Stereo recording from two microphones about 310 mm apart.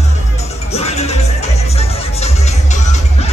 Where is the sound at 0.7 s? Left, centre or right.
Left.